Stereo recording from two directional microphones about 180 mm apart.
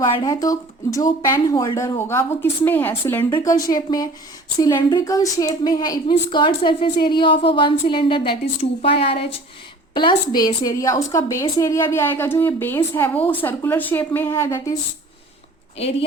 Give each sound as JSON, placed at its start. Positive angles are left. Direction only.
{"t": 0.2, "sound": "a woman's voice", "side_deg": 20}